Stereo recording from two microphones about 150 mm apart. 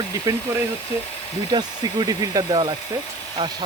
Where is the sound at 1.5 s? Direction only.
30° right (ahead or behind).